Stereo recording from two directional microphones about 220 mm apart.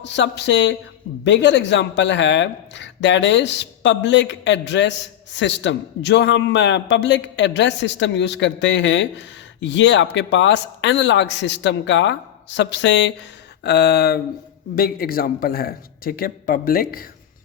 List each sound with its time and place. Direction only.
0.0 s speech: 55° left (ahead or behind)
13.7 s a sound: 50° left (ahead or behind)
14.8 s a man's voice: 45° left (ahead or behind)